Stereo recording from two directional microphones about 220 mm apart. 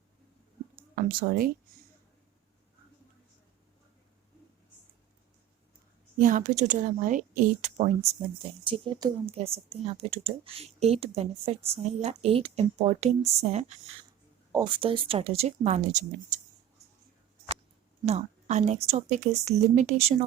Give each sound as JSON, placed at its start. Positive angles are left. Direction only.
{"t": 0.9, "sound": "a woman's voice", "side_deg": -40}
{"t": 6.1, "sound": "a woman's voice", "side_deg": -35}
{"t": 8.6, "sound": "speech", "side_deg": -20}
{"t": 18.0, "sound": "a woman's voice", "side_deg": -30}